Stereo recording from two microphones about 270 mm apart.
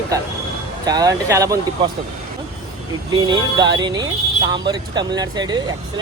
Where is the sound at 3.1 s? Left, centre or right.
Centre.